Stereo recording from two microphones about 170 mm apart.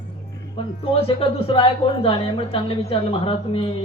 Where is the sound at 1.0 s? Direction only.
35° left (ahead or behind).